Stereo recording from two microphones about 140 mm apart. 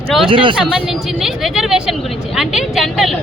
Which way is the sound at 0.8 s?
Centre (ahead or behind).